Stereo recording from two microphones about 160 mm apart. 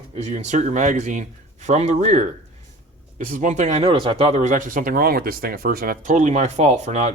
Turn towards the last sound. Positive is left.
turn(degrees=-45)  # may be behind; listen again after turning